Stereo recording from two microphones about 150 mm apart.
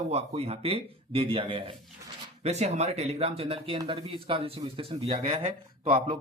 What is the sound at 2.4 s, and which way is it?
Speech, 45° right (ahead or behind).